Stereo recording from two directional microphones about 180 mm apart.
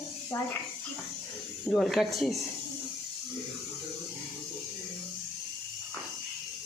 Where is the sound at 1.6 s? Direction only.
Centre (ahead or behind).